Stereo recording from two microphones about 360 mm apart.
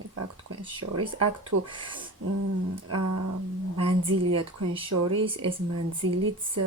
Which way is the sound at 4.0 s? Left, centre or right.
Right.